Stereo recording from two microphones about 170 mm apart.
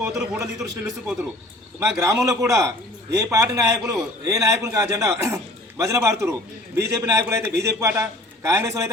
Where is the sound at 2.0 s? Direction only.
20° right (ahead or behind).